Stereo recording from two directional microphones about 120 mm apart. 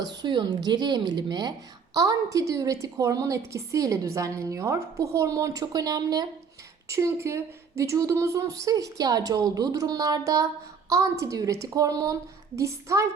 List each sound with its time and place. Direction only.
0.0 s a woman's voice: 35° right (ahead or behind)